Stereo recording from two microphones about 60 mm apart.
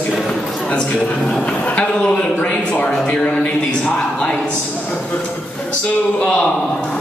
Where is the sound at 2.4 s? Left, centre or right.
Left.